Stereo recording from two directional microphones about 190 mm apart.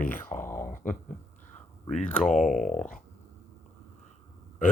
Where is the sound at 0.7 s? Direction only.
45° left (ahead or behind).